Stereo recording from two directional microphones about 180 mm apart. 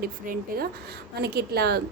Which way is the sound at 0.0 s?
55° right (ahead or behind).